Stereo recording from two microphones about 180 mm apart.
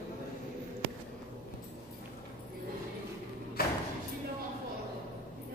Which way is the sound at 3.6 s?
55° left (ahead or behind).